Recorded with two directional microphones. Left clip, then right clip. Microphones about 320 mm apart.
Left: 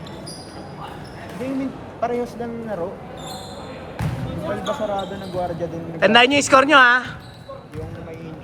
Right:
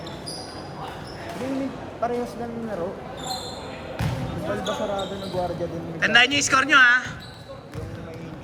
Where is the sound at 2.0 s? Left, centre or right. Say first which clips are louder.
Left 3 dB; centre.